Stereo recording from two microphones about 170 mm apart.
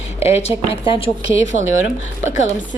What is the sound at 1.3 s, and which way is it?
Speech, 90° left.